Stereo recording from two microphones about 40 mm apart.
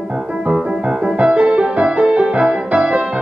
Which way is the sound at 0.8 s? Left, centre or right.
Right.